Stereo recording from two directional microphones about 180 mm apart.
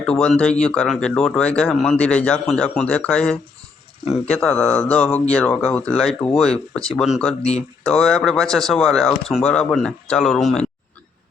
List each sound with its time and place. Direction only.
0.0 s speech: 5° left (ahead or behind)